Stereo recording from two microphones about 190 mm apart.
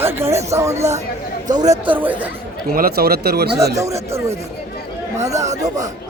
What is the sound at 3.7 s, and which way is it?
Speech, 15° right (ahead or behind).